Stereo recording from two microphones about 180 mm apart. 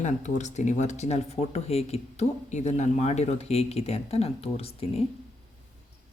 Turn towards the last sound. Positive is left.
turn(degrees=35)  # may be behind; listen again after turning